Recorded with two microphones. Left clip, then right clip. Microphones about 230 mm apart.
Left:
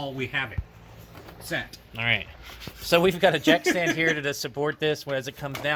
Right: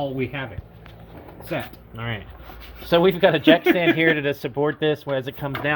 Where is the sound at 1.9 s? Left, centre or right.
Left.